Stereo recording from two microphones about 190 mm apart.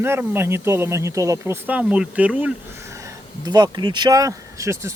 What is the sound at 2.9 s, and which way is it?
Speech, 20° right (ahead or behind).